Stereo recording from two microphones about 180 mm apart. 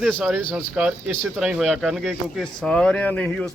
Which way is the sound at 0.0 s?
Centre (ahead or behind).